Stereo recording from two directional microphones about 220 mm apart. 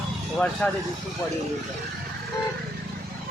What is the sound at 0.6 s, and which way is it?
Speech, 5° left (ahead or behind).